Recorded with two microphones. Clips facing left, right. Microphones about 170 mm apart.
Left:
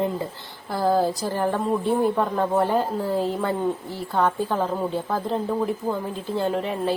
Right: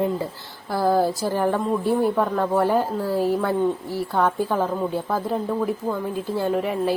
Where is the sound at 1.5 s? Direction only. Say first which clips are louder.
Left 1 dB; centre (ahead or behind).